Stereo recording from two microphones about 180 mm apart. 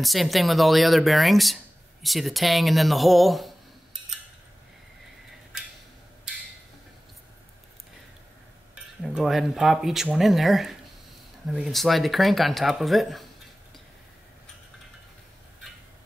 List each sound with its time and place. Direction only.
0.0 s speech: centre (ahead or behind)
8.7 s speech: 5° right (ahead or behind)